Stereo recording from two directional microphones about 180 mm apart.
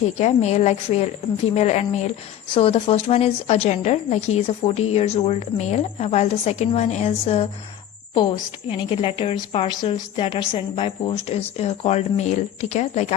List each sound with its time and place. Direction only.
0.0 s a woman's voice: 40° left (ahead or behind)
8.7 s a woman's voice: 30° left (ahead or behind)